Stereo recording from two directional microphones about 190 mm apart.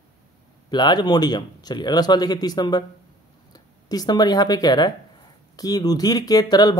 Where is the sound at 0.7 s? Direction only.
20° left (ahead or behind).